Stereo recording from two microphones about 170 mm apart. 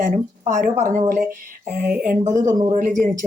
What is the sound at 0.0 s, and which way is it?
A woman's voice, 45° right (ahead or behind).